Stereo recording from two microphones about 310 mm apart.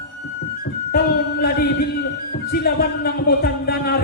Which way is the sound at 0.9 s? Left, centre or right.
Left.